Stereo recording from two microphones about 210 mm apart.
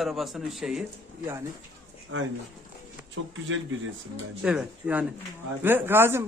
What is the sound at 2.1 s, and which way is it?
Speech, 65° right (ahead or behind).